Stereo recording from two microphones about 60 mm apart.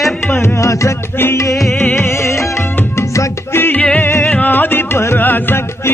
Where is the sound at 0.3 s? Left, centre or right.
Left.